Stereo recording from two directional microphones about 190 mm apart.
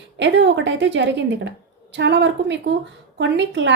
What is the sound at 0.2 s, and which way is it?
A woman's voice, 70° right (ahead or behind).